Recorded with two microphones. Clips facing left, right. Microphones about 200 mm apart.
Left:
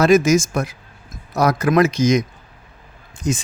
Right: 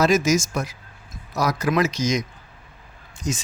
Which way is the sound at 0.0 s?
55° left (ahead or behind).